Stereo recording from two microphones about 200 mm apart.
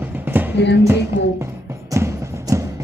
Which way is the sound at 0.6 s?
60° left (ahead or behind).